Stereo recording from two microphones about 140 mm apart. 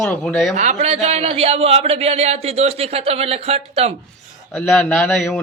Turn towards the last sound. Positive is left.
turn(degrees=15)  # may be behind; listen again after turning